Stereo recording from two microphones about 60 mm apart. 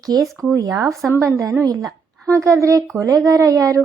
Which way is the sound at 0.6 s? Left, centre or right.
Right.